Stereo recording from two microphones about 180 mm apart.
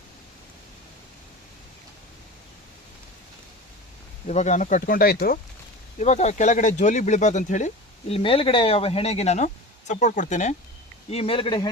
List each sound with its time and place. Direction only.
4.3 s speech: 40° left (ahead or behind)
6.0 s speech: 40° left (ahead or behind)
8.1 s speech: 30° left (ahead or behind)
11.1 s speech: 30° left (ahead or behind)